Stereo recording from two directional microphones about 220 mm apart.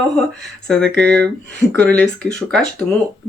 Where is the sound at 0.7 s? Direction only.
5° left (ahead or behind).